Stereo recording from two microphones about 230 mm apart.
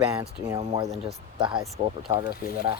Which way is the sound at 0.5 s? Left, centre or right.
Centre.